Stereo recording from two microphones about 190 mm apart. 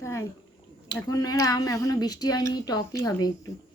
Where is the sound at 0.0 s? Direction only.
15° left (ahead or behind).